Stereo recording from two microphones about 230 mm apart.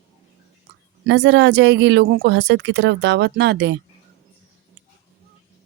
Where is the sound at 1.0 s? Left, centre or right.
Right.